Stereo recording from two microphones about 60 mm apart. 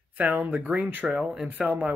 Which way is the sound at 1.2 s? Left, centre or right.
Centre.